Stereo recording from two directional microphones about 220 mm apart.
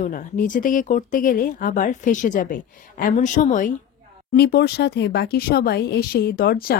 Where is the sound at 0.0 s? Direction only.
40° left (ahead or behind).